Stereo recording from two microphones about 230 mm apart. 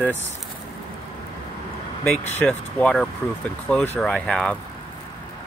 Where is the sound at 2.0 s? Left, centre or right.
Centre.